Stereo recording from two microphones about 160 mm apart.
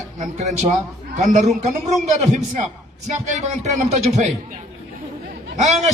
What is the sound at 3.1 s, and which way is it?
Speech, 50° right (ahead or behind).